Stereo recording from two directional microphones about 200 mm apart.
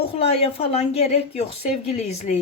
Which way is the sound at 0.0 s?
30° left (ahead or behind).